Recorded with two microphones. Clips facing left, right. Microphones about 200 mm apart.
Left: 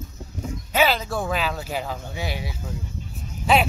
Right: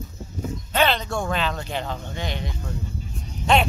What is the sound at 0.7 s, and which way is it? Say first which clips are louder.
Speech: left 1 dB; 5° left (ahead or behind).